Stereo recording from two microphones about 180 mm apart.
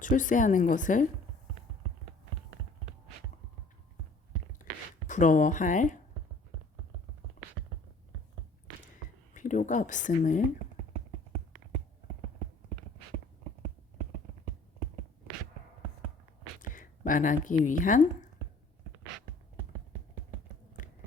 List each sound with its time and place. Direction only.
0.0 s speech: 45° left (ahead or behind)
5.0 s speech: 45° left (ahead or behind)
9.3 s speech: 45° left (ahead or behind)
16.6 s speech: 45° left (ahead or behind)